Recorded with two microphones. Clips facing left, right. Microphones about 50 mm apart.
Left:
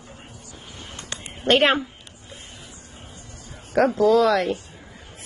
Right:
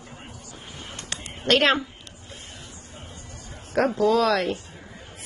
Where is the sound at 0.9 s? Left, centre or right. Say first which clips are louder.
Even; left.